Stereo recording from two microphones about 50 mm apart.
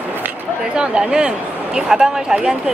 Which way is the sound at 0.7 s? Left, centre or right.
Centre.